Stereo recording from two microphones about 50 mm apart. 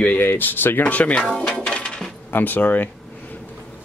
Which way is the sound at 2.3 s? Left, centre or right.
Left.